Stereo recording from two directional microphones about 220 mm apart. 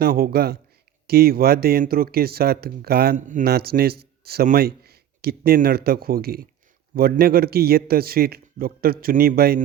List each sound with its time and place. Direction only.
0.0 s speech: 45° right (ahead or behind)